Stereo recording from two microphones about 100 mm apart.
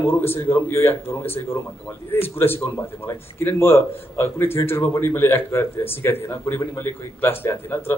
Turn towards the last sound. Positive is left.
turn(degrees=25)  # may be behind; listen again after turning